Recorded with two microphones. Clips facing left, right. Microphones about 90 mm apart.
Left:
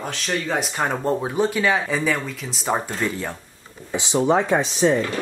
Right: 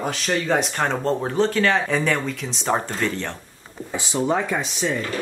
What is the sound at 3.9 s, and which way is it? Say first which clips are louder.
Speech: left 3 dB; 20° left (ahead or behind).